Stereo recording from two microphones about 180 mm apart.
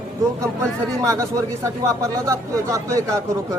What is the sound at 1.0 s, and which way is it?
Speech, 15° right (ahead or behind).